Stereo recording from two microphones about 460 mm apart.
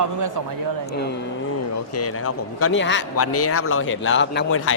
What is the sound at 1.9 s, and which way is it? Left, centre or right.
Speech, left.